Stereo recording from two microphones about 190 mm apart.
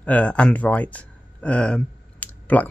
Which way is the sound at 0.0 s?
10° left (ahead or behind).